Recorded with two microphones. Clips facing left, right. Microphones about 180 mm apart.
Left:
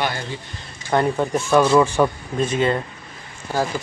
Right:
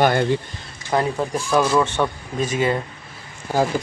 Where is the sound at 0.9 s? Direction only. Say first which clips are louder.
Left 2 dB; centre (ahead or behind).